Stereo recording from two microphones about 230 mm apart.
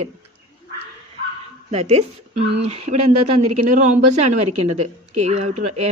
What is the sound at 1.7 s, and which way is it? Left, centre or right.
Speech, right.